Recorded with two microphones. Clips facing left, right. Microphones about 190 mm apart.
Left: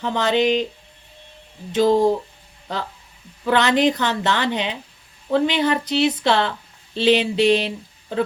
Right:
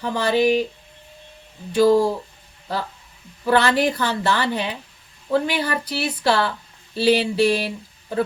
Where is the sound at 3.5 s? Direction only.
20° left (ahead or behind).